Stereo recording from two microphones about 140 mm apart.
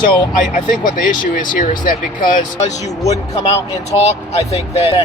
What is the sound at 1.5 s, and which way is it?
Speech, 70° left (ahead or behind).